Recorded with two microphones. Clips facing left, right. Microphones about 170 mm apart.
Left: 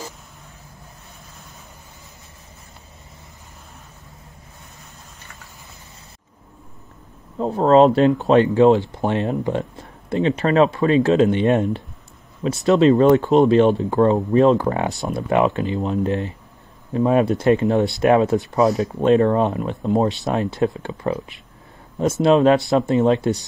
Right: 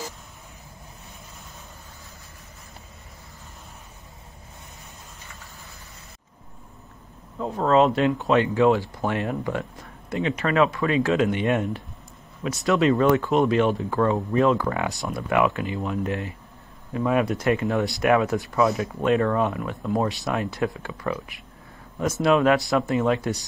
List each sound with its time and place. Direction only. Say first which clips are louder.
7.3 s speech: left 6 dB; 35° left (ahead or behind)